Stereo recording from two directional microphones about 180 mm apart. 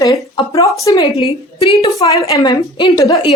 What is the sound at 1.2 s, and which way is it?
Speech, 35° left (ahead or behind).